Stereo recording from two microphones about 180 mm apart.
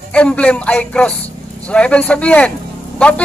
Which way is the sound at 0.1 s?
5° left (ahead or behind).